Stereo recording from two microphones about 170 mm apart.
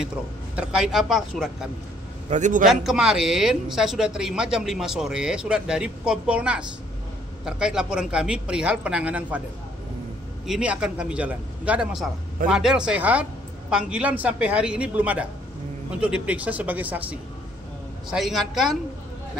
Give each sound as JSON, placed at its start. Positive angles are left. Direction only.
{"t": 0.6, "sound": "speech", "side_deg": -5}
{"t": 2.2, "sound": "a man's voice", "side_deg": -45}
{"t": 2.7, "sound": "speech", "side_deg": -5}
{"t": 10.4, "sound": "speech", "side_deg": -5}